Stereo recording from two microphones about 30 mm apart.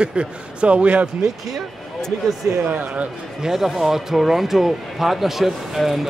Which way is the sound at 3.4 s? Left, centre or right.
Centre.